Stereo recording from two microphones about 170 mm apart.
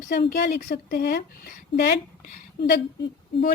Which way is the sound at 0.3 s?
60° left (ahead or behind).